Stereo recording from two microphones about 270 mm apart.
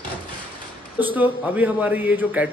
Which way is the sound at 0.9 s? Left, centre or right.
Centre.